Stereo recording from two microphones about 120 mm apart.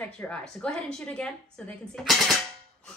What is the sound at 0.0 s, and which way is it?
A woman's voice, 10° left (ahead or behind).